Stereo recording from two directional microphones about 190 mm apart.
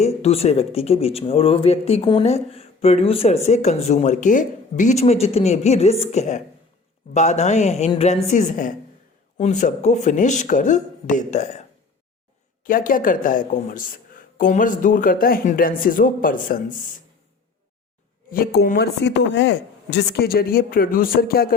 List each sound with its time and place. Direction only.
0.0 s speech: 35° left (ahead or behind)
12.6 s speech: 45° left (ahead or behind)
18.3 s speech: 50° left (ahead or behind)
19.0 s speech: 75° left (ahead or behind); by 21.5 s 50° left (ahead or behind)